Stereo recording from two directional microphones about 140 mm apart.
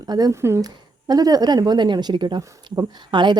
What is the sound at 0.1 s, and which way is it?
A woman's voice, 25° right (ahead or behind).